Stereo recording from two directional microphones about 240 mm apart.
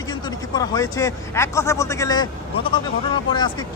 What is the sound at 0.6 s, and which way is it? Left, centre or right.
Speech, centre.